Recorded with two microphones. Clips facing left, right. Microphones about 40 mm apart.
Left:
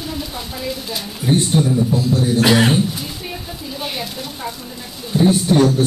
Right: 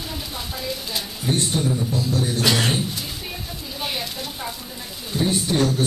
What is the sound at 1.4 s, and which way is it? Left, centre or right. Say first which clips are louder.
A man's voice: left 6 dB; centre.